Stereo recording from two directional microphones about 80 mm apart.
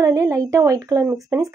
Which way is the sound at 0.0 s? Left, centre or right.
Right.